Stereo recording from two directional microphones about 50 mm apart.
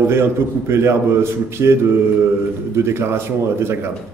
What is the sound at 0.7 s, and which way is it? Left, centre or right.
A man's voice, right.